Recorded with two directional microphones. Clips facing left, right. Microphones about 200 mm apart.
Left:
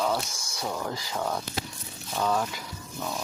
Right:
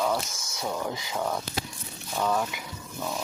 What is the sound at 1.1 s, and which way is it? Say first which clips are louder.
Speech: right 1 dB; centre (ahead or behind).